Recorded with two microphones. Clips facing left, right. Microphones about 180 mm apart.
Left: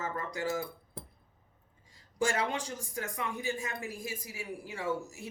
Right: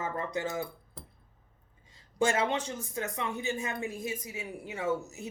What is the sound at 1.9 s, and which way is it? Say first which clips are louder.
A man's voice: right 3 dB; 25° right (ahead or behind).